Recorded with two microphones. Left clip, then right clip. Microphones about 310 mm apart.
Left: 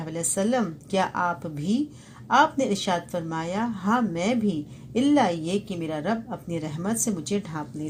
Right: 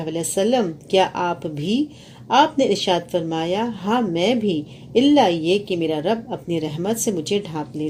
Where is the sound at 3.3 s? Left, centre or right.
Left.